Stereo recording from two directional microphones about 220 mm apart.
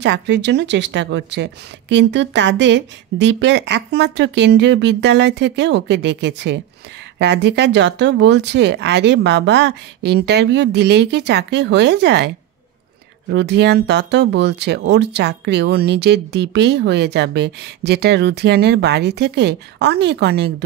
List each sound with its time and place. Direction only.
0.0 s speech: 55° right (ahead or behind)
13.3 s speech: 50° right (ahead or behind)